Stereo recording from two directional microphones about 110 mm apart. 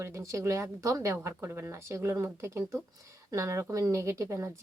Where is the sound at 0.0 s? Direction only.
25° right (ahead or behind).